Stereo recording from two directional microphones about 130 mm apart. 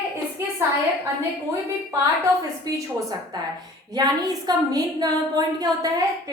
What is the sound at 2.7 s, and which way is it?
Speech, 30° right (ahead or behind).